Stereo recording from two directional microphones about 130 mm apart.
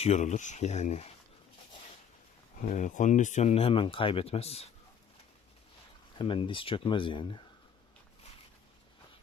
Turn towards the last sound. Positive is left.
turn(degrees=40)  # may be behind; listen again after turning